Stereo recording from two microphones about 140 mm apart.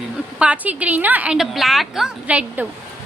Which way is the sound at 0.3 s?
10° right (ahead or behind).